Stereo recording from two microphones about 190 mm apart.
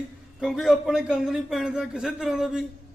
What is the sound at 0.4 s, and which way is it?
A man's voice, centre (ahead or behind).